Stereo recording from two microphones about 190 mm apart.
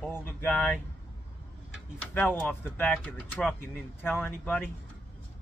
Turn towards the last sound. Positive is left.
turn(degrees=10)  # may be behind; listen again after turning